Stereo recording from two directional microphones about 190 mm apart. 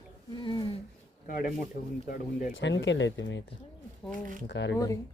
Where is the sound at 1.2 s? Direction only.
45° left (ahead or behind).